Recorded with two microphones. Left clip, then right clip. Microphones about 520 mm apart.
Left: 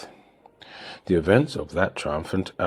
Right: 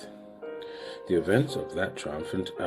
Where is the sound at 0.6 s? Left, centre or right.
Left.